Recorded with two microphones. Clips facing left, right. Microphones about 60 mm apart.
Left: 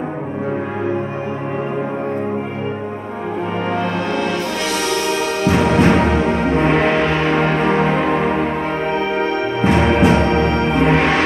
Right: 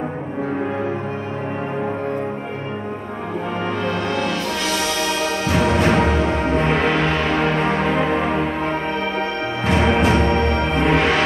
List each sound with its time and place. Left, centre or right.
5.8 s music: left
6.2 s music: centre
7.1 s music: left
7.9 s music: centre
11.0 s music: left